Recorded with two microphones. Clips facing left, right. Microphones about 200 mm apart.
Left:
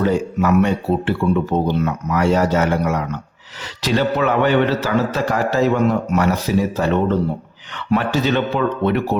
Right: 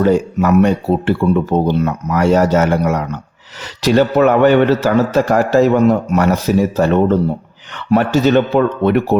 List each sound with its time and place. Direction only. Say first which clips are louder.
0.0 s a man's voice: right 4 dB; 45° right (ahead or behind)